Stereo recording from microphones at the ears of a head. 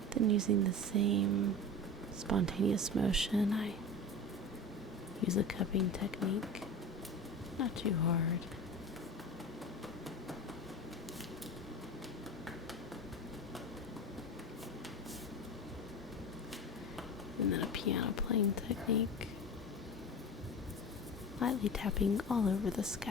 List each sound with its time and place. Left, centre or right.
0.1 s speech: right
5.2 s speech: left
7.5 s speech: left
17.3 s speech: left
21.3 s speech: left